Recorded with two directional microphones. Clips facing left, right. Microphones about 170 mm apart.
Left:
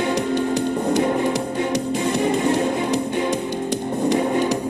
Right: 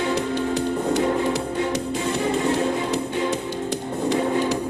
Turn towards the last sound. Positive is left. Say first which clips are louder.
# left 2 dB
turn(degrees=15)  # may be behind; listen again after turning